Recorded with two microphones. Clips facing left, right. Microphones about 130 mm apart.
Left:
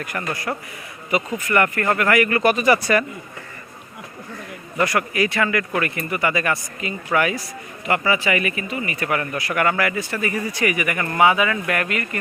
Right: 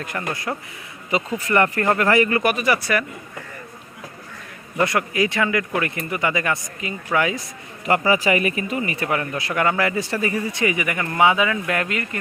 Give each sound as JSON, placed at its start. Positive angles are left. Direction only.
{"t": 0.5, "sound": "a man's voice", "side_deg": -5}
{"t": 1.5, "sound": "speech", "side_deg": -30}
{"t": 2.3, "sound": "speech", "side_deg": -10}
{"t": 4.8, "sound": "speech", "side_deg": -20}
{"t": 7.9, "sound": "speech", "side_deg": -35}
{"t": 8.8, "sound": "speech", "side_deg": -30}